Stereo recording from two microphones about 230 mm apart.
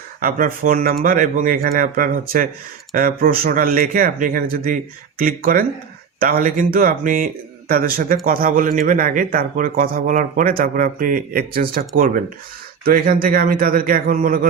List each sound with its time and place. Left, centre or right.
0.2 s speech: right